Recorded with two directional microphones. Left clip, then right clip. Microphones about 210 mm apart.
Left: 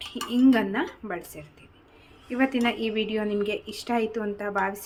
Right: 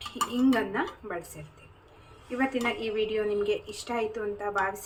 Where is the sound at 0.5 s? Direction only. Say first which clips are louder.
Left 2 dB; 45° left (ahead or behind).